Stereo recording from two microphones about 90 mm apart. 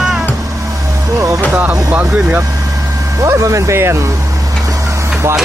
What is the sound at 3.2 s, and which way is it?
Speech, 35° right (ahead or behind).